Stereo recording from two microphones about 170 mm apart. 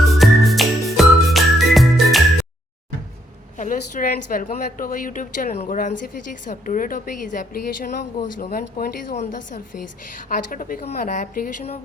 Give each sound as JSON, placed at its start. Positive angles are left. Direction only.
{"t": 0.2, "sound": "music", "side_deg": 0}
{"t": 3.6, "sound": "a woman's voice", "side_deg": 50}
{"t": 9.1, "sound": "a woman's voice", "side_deg": 45}